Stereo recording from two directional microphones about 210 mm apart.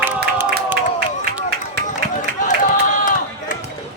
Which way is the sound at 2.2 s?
40° left (ahead or behind).